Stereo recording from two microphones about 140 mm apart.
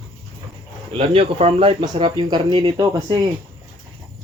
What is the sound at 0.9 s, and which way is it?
Speech, 45° right (ahead or behind).